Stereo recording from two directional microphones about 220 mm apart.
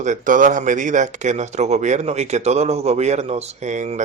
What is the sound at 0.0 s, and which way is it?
Speech, 35° right (ahead or behind).